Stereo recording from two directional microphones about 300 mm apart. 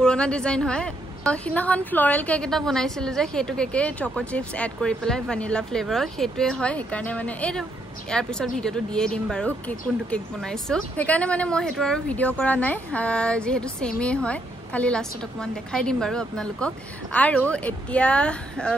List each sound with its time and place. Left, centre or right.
0.0 s a woman's voice: centre